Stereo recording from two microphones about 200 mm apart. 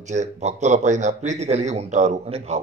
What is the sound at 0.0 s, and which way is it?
Speech, 35° right (ahead or behind).